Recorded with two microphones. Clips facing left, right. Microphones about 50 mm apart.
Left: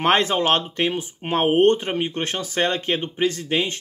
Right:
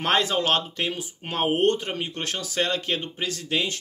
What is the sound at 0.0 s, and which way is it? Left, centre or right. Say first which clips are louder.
Speech: left 4 dB; left.